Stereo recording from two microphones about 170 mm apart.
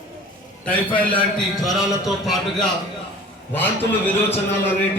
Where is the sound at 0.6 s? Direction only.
10° left (ahead or behind).